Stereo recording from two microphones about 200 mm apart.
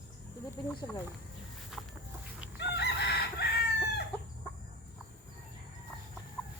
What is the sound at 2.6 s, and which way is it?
Chicken, 60° left (ahead or behind).